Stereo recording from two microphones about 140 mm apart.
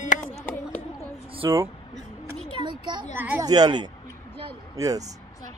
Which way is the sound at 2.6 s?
35° right (ahead or behind).